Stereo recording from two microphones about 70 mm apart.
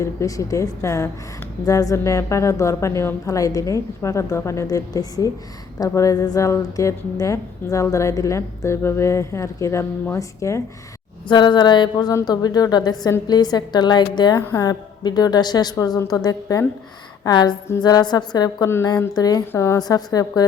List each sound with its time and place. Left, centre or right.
0.0 s a woman's voice: left
1.6 s a woman's voice: left
4.6 s a woman's voice: left
11.3 s mantra: left
12.2 s a woman's voice: left
14.5 s a woman's voice: left
15.7 s a woman's voice: left
17.2 s a woman's voice: left
18.9 s a woman's voice: left
19.5 s a woman's voice: left
19.8 s a woman's voice: left